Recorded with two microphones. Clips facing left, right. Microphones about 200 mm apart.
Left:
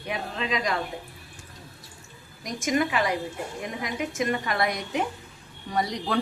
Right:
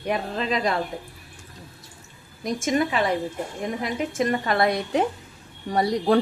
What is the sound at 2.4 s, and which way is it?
Speech, 30° right (ahead or behind).